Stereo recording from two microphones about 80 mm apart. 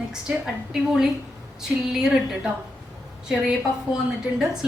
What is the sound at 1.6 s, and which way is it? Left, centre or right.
A woman's voice, centre.